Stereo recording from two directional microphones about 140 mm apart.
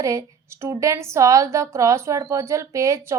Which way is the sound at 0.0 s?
20° right (ahead or behind).